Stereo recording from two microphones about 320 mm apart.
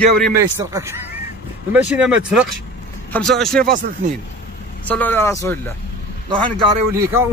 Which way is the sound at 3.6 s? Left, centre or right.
Right.